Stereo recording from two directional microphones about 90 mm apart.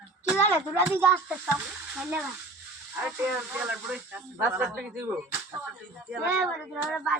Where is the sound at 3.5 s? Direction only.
10° right (ahead or behind).